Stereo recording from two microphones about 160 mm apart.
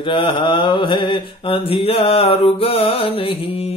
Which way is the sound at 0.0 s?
30° left (ahead or behind).